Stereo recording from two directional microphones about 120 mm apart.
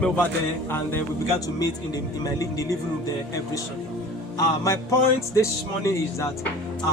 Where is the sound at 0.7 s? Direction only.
20° left (ahead or behind).